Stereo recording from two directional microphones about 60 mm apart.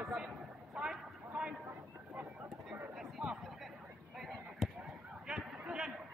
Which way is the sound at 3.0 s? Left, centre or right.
Centre.